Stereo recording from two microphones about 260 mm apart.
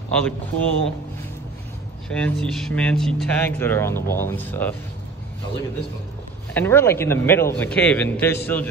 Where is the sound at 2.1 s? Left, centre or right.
Centre.